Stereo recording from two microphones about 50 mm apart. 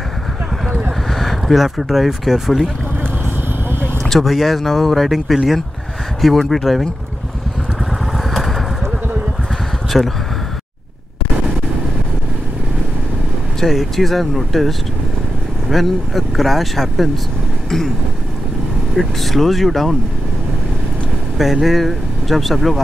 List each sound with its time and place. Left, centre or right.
0.7 s vehicle: right
1.1 s speech: centre
4.0 s speech: centre
8.2 s vehicle: centre
9.9 s speech: centre
13.7 s speech: centre
17.6 s vehicle: centre
18.9 s speech: centre
21.4 s speech: centre